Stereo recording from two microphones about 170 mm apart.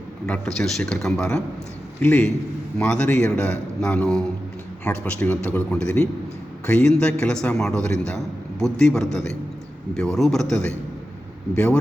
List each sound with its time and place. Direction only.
0.3 s a man's voice: 5° left (ahead or behind)